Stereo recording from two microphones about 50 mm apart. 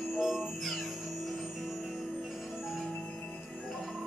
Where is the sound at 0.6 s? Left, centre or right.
Centre.